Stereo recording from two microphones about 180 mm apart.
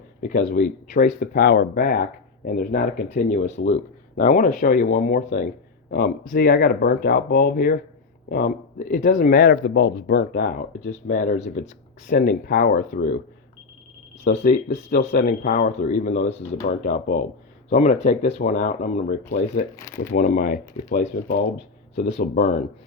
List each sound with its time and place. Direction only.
0.2 s speech: 50° left (ahead or behind)
14.3 s speech: 50° left (ahead or behind)
17.7 s speech: 40° left (ahead or behind)
18.0 s speech: 50° left (ahead or behind)